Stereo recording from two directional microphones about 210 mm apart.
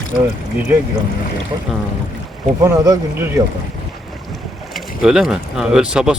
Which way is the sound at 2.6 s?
15° right (ahead or behind).